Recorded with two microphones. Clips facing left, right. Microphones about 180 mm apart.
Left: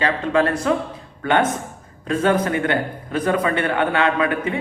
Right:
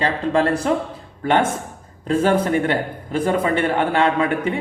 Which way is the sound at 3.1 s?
25° right (ahead or behind).